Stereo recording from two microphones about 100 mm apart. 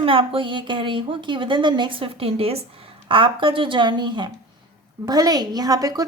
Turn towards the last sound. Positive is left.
turn(degrees=-40)  # may be behind; listen again after turning